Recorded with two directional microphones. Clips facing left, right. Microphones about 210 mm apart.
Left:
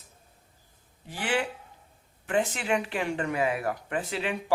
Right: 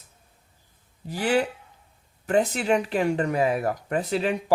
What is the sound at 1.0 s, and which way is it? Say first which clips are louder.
A woman's voice: right 6 dB; 40° right (ahead or behind).